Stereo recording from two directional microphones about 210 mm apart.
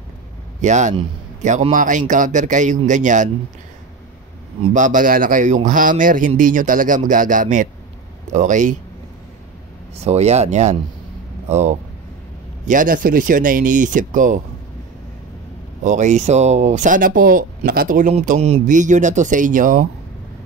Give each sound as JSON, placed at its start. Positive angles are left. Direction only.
{"t": 0.6, "sound": "speech", "side_deg": -35}
{"t": 4.6, "sound": "speech", "side_deg": -30}
{"t": 9.9, "sound": "speech", "side_deg": -30}
{"t": 15.8, "sound": "speech", "side_deg": -35}